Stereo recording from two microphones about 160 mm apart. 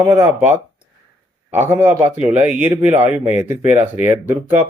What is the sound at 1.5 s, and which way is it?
Speech, 15° right (ahead or behind).